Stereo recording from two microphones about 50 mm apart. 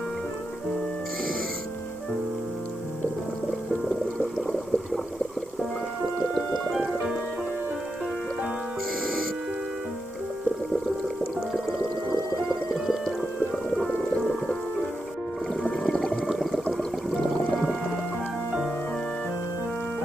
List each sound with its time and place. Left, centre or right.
3.9 s a sound: centre
6.8 s music: centre
12.4 s music: centre
15.7 s whale vocalization: centre
16.3 s a sound: centre
17.6 s music: centre